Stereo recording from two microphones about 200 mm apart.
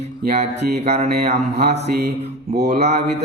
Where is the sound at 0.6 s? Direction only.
55° right (ahead or behind).